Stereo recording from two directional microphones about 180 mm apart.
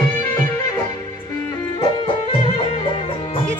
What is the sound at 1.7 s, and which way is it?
Music, 25° left (ahead or behind).